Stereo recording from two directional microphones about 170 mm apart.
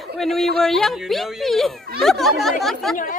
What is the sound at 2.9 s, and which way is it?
Speech, 50° left (ahead or behind).